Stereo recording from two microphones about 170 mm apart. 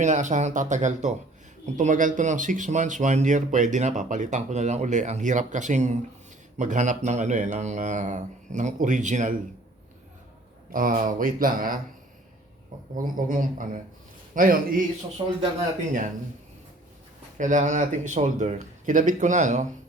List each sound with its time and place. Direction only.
0.0 s speech: 45° right (ahead or behind)
10.7 s speech: 55° right (ahead or behind)
13.0 s speech: 50° right (ahead or behind)
17.3 s speech: 50° right (ahead or behind)